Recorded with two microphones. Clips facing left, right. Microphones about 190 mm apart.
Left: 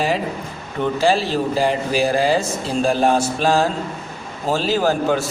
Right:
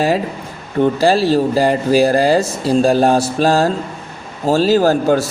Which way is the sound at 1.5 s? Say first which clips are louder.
Right 6 dB; 40° right (ahead or behind).